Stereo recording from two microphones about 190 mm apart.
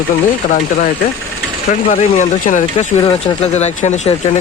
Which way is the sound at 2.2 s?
40° left (ahead or behind).